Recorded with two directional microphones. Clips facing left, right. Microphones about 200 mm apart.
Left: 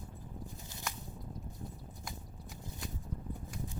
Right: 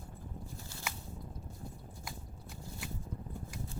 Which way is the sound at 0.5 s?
20° left (ahead or behind).